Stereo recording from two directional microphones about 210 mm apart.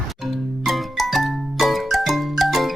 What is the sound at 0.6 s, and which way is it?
Music, centre (ahead or behind).